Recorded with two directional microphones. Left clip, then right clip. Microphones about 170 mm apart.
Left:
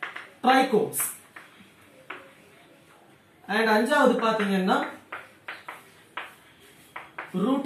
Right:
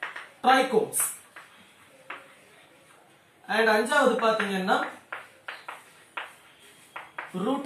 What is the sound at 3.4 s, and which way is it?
Speech, 15° right (ahead or behind).